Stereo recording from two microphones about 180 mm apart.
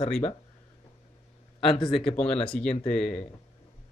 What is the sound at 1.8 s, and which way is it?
Speech, centre (ahead or behind).